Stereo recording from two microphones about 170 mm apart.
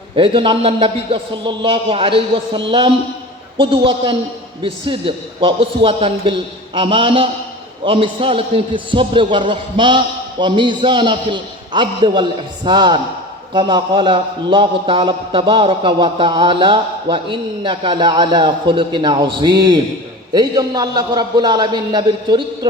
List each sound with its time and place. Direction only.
0.2 s a man's voice: 30° right (ahead or behind)